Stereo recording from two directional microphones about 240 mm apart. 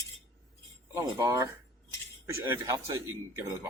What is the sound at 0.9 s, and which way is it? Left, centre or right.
Speech, centre.